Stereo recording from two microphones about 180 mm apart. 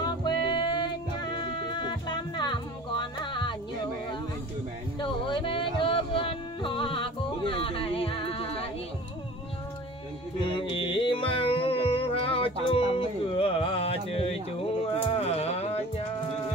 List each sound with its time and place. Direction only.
0.0 s music: 25° left (ahead or behind)
4.9 s music: 25° left (ahead or behind)
10.4 s music: 30° left (ahead or behind)